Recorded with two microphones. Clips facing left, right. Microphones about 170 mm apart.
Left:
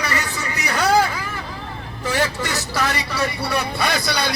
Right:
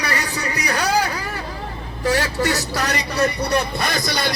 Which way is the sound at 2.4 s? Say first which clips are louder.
Right 2 dB; 40° right (ahead or behind).